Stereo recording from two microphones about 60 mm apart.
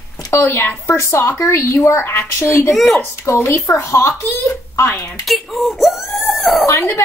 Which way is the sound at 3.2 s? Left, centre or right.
Left.